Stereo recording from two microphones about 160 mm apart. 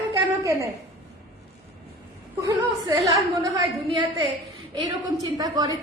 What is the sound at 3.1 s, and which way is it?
Speech, 20° right (ahead or behind).